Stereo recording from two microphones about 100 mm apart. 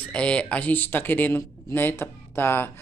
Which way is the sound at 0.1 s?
10° left (ahead or behind).